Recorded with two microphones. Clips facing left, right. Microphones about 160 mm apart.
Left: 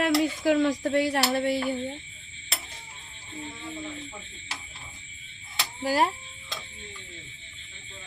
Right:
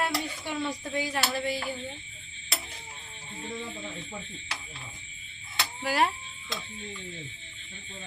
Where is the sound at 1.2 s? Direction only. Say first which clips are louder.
Left 5 dB; 50° left (ahead or behind).